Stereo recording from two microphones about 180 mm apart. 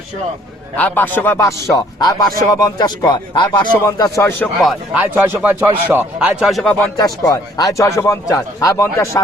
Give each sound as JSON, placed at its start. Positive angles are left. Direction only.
{"t": 0.8, "sound": "a man's voice", "side_deg": 10}
{"t": 4.6, "sound": "a man's voice", "side_deg": 0}
{"t": 5.1, "sound": "speech", "side_deg": -10}
{"t": 7.0, "sound": "a man's voice", "side_deg": 20}